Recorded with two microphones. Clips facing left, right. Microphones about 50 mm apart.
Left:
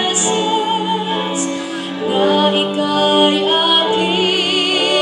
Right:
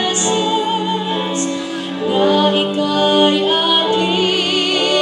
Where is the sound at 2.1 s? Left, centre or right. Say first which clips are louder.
Even; centre.